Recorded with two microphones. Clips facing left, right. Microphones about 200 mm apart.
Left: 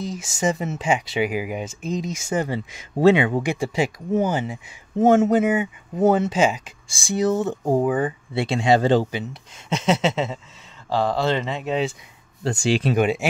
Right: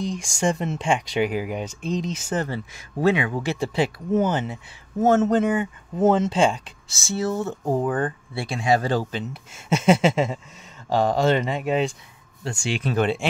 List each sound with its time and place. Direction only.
0.0 s speech: 5° left (ahead or behind); by 3.4 s 25° left (ahead or behind)
3.4 s speech: 10° left (ahead or behind)
8.3 s speech: 25° left (ahead or behind)
9.3 s speech: 10° right (ahead or behind)
12.4 s speech: 35° left (ahead or behind)
12.9 s speech: 10° left (ahead or behind)